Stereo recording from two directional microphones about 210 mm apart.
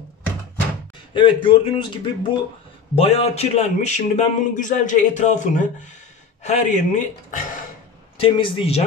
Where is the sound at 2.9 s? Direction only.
30° left (ahead or behind).